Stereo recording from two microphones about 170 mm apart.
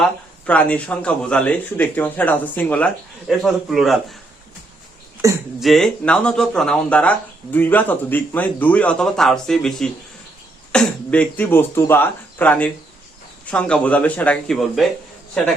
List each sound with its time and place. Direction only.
0.0 s speech: 10° left (ahead or behind)
5.2 s speech: 20° right (ahead or behind)
5.5 s speech: centre (ahead or behind)